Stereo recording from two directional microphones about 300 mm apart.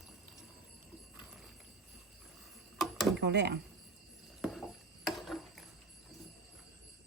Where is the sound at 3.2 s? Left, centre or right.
Right.